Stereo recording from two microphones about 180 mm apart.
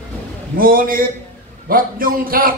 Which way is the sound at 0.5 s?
55° right (ahead or behind).